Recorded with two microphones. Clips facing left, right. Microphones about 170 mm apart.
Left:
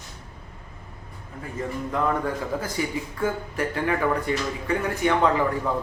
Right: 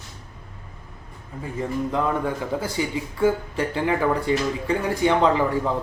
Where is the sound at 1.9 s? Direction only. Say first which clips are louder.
Left 2 dB; 20° right (ahead or behind).